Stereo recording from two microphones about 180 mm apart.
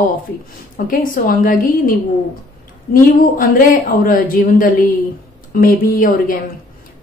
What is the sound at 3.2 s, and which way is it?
A woman's voice, 50° left (ahead or behind).